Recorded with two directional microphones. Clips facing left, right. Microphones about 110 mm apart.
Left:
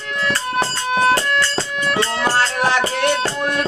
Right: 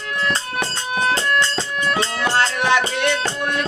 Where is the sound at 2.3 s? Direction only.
40° left (ahead or behind).